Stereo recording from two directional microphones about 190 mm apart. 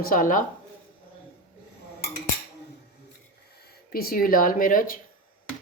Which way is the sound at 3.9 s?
50° left (ahead or behind).